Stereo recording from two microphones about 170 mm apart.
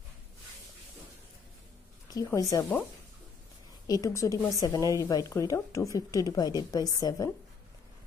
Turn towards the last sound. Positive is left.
turn(degrees=20)  # may be behind; listen again after turning